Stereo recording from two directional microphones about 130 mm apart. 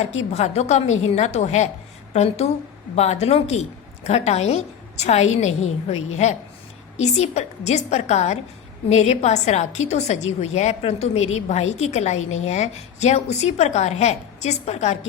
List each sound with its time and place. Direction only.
0.0 s a woman's voice: 60° left (ahead or behind)